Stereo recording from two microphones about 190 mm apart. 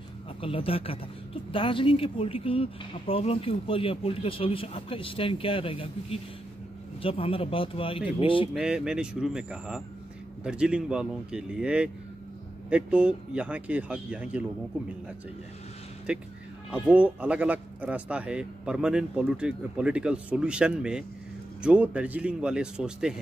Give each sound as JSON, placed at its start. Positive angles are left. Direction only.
{"t": 0.4, "sound": "speech", "side_deg": 30}
{"t": 8.5, "sound": "speech", "side_deg": -5}
{"t": 16.1, "sound": "speech", "side_deg": -5}